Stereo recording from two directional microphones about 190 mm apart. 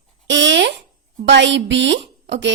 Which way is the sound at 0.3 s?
75° right (ahead or behind).